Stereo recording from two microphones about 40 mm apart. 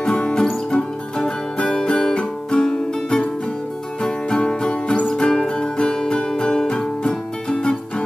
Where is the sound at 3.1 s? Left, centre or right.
Left.